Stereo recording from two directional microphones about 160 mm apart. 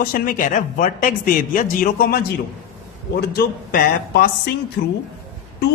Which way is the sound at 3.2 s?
80° left.